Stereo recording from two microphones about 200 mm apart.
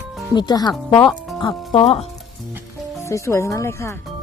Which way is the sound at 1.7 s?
30° left (ahead or behind).